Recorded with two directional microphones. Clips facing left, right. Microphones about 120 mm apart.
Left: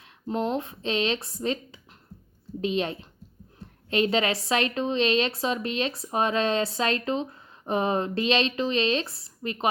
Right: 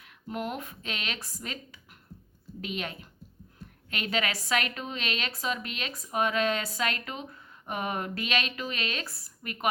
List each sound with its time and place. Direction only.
0.0 s a woman's voice: 25° left (ahead or behind)